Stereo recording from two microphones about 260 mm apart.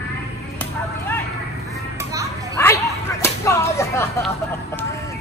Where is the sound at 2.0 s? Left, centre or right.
Centre.